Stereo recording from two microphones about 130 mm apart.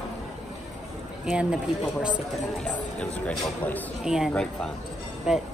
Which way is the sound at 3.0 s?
10° left (ahead or behind).